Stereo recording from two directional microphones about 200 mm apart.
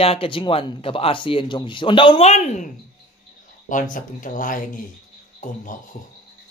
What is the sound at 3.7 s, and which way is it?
Speech, 40° left (ahead or behind).